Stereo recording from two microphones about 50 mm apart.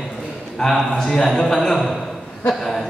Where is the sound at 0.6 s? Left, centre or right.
Centre.